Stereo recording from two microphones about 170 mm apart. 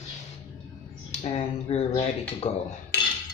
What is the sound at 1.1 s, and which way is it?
Speech, 40° left (ahead or behind).